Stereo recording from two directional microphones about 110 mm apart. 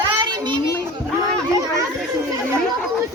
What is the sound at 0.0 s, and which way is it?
Children playing, 40° right (ahead or behind).